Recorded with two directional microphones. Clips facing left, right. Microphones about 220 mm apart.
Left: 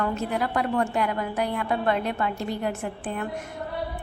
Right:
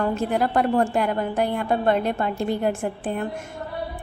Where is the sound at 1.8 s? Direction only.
30° right (ahead or behind).